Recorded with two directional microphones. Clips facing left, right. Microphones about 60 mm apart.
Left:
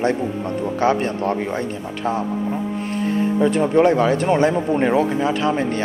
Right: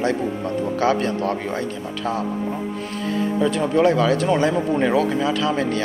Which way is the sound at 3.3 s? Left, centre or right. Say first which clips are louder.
Left 3 dB; left.